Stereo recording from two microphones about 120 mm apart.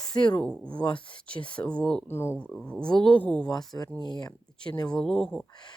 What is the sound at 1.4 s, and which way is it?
Speech, 45° left (ahead or behind).